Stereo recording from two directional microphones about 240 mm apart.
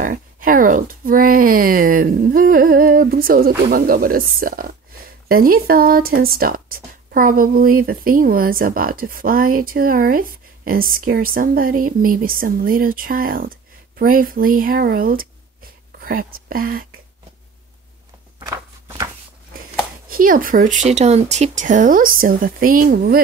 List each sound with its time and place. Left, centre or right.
0.0 s speech: right
20.1 s speech: right